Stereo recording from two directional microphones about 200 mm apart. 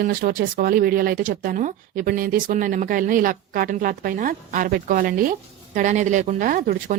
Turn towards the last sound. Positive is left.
turn(degrees=-45)  # may be behind; listen again after turning